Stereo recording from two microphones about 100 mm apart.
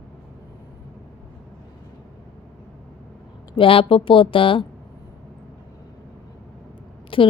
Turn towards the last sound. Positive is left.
turn(degrees=60)  # may be behind; listen again after turning